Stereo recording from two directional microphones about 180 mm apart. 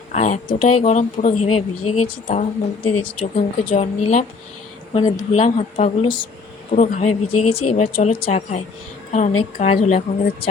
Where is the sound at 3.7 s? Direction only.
35° left (ahead or behind).